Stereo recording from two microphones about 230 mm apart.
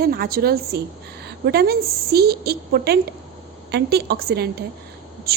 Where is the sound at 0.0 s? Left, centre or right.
Right.